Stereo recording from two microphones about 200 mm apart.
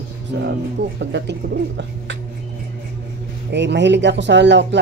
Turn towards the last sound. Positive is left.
turn(degrees=-60)  # may be behind; listen again after turning